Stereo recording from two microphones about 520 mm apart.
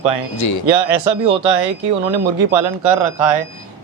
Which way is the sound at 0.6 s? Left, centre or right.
Right.